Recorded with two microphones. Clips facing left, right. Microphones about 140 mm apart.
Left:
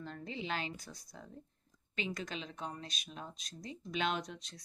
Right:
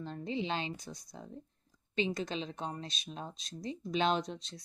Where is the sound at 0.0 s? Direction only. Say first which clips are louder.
Right 6 dB; 25° right (ahead or behind).